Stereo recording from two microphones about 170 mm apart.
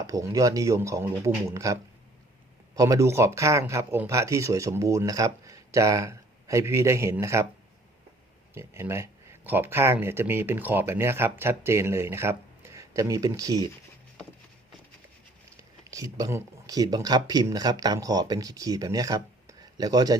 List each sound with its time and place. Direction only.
0.1 s speech: 20° right (ahead or behind)
8.5 s speech: 15° right (ahead or behind)
15.5 s speech: 20° right (ahead or behind)